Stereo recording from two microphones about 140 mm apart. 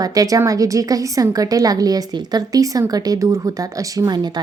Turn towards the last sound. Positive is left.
turn(degrees=-30)  # may be behind; listen again after turning